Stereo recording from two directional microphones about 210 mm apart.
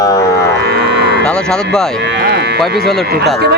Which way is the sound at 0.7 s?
55° right (ahead or behind).